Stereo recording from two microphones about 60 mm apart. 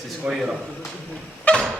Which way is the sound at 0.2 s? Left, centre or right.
Right.